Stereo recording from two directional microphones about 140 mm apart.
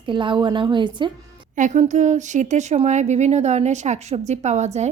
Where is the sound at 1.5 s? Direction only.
65° right (ahead or behind).